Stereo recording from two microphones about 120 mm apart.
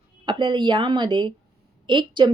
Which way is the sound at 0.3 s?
40° right (ahead or behind).